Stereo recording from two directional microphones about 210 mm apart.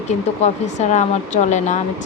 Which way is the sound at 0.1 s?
30° left (ahead or behind).